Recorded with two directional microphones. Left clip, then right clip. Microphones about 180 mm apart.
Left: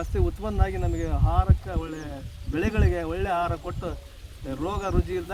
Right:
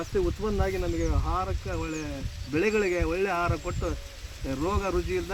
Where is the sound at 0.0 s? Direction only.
10° left (ahead or behind).